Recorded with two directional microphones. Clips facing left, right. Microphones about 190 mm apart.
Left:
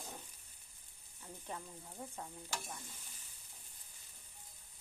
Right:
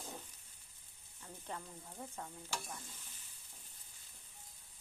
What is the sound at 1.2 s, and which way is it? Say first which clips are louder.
Speech: even; 10° left (ahead or behind).